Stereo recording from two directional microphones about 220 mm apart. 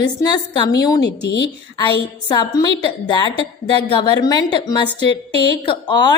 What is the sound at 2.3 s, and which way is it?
A woman's voice, 20° left (ahead or behind).